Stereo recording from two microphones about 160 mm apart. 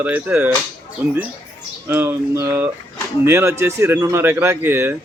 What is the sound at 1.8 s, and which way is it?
Speech, 15° right (ahead or behind).